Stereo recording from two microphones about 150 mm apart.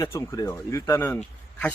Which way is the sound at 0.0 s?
20° left (ahead or behind).